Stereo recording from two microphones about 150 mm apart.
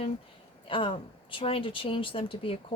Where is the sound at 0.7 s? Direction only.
35° left (ahead or behind).